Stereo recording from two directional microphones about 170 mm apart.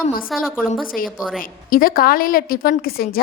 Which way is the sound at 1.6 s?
55° left (ahead or behind).